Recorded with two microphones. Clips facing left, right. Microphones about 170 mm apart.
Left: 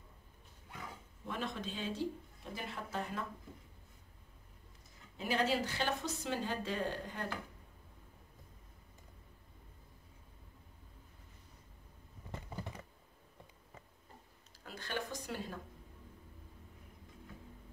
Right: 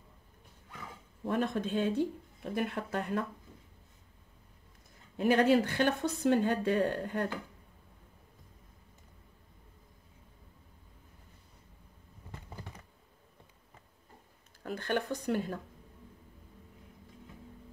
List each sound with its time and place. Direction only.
1.2 s speech: 50° right (ahead or behind)
5.1 s speech: 55° right (ahead or behind)
14.6 s speech: 55° right (ahead or behind)